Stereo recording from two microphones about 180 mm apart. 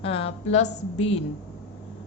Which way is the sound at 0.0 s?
35° left (ahead or behind).